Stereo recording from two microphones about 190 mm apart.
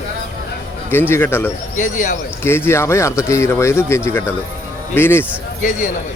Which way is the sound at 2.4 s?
10° left (ahead or behind).